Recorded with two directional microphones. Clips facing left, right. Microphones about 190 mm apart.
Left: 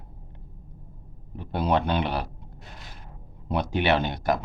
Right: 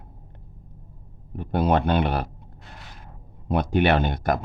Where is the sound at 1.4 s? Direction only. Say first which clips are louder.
Right 3 dB; 50° right (ahead or behind).